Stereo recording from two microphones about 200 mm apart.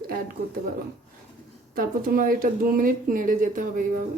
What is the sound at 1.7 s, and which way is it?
Speech, 45° right (ahead or behind).